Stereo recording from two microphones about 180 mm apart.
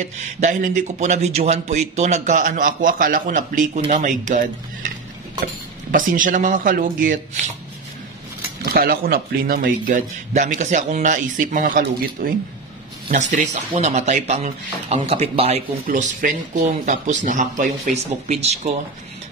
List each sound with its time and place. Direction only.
0.0 s speech: 40° right (ahead or behind)
8.7 s speech: 55° right (ahead or behind); by 18.7 s 40° right (ahead or behind)